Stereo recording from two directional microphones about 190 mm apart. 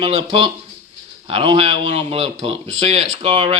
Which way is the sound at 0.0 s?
30° right (ahead or behind).